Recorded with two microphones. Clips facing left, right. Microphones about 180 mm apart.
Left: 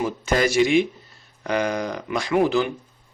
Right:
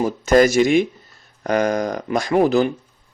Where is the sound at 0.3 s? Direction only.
45° right (ahead or behind).